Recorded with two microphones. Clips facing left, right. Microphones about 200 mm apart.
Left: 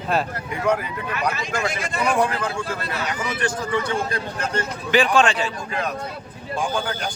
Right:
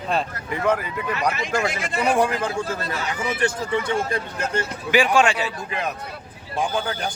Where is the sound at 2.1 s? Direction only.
40° right (ahead or behind).